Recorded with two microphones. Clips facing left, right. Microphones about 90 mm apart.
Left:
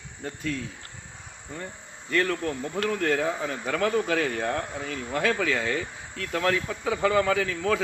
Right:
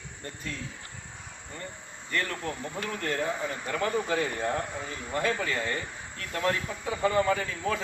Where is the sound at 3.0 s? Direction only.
90° left.